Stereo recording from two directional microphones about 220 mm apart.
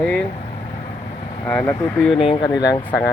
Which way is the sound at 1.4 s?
5° left (ahead or behind).